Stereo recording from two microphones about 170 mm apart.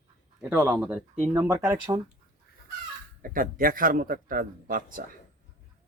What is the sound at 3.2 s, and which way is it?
Speech, 55° right (ahead or behind).